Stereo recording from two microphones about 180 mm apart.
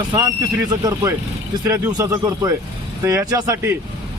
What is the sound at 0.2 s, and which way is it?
Speech, 20° right (ahead or behind).